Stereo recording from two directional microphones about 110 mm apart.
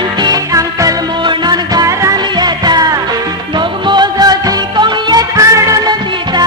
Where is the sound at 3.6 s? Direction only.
45° right (ahead or behind).